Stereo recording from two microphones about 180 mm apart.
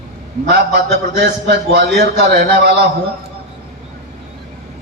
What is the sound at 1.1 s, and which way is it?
A man's voice, 70° right (ahead or behind).